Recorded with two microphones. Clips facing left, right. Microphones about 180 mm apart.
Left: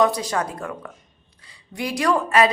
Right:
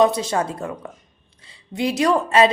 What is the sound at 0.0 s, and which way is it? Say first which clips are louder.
A woman's voice: right 3 dB; 25° right (ahead or behind).